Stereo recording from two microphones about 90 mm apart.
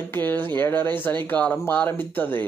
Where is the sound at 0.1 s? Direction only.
20° left (ahead or behind).